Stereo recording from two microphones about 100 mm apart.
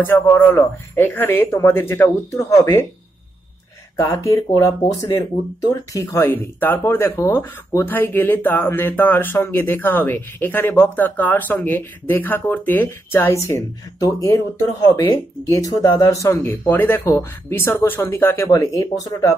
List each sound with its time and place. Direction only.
0.0 s speech: 25° left (ahead or behind)
3.9 s speech: 35° left (ahead or behind)
6.0 s speech: 20° left (ahead or behind)
18.5 s speech: 35° left (ahead or behind)